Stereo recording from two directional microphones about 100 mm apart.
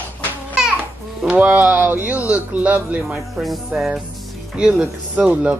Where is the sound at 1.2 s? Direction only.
15° right (ahead or behind).